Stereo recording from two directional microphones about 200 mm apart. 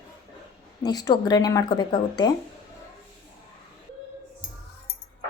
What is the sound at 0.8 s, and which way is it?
Speech, 20° left (ahead or behind).